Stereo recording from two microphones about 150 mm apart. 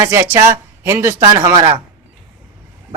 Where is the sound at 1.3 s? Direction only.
30° right (ahead or behind).